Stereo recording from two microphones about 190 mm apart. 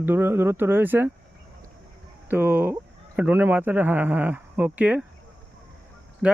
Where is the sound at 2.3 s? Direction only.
10° right (ahead or behind).